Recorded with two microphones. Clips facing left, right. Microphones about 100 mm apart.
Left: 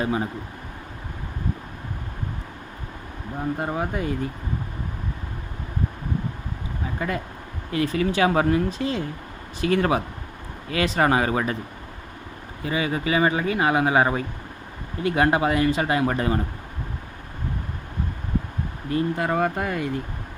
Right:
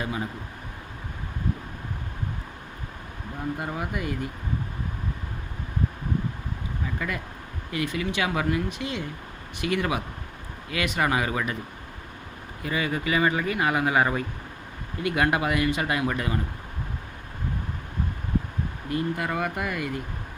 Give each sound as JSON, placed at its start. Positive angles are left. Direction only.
{"t": 0.0, "sound": "speech", "side_deg": 30}
{"t": 3.6, "sound": "speech", "side_deg": 30}
{"t": 7.0, "sound": "speech", "side_deg": 30}
{"t": 12.6, "sound": "speech", "side_deg": 25}
{"t": 18.9, "sound": "speech", "side_deg": 30}